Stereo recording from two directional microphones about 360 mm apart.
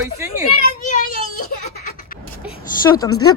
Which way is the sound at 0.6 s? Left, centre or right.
Left.